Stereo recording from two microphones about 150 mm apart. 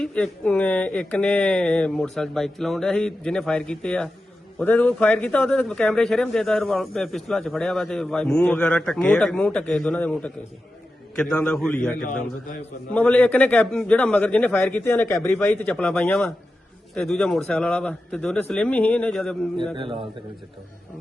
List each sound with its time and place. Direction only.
0.0 s a man's voice: 5° left (ahead or behind)
19.7 s speech: 35° right (ahead or behind)